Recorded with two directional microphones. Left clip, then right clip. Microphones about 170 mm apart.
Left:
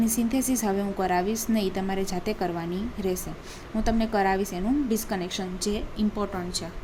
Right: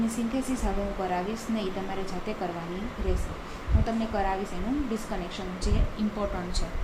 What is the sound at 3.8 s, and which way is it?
A woman's voice, 75° left (ahead or behind).